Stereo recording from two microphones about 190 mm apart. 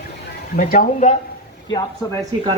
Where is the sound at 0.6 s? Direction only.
45° left (ahead or behind).